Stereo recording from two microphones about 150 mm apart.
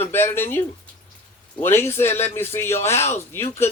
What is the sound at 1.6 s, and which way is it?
A man's voice, 15° left (ahead or behind).